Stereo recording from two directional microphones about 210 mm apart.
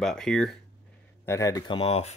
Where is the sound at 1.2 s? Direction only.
15° left (ahead or behind); by 2.1 s 30° left (ahead or behind).